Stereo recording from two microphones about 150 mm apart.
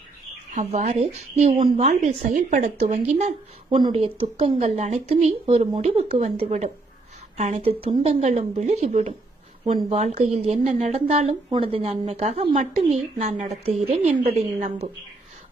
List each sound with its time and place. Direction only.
0.5 s a woman's voice: 50° right (ahead or behind)
3.7 s a woman's voice: 30° right (ahead or behind); by 9.1 s 50° right (ahead or behind)
10.2 s a woman's voice: 45° right (ahead or behind)